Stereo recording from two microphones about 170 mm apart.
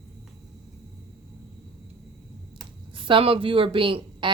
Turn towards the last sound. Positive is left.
turn(degrees=-30)  # may be behind; listen again after turning